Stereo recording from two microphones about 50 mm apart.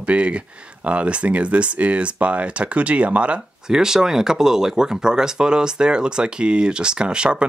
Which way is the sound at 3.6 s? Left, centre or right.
Centre.